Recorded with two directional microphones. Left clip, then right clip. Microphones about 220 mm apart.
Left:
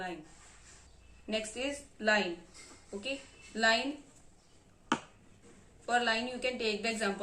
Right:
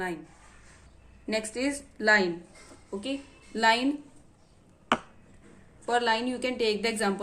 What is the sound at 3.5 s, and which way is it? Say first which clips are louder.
Speech: right 5 dB; 45° right (ahead or behind).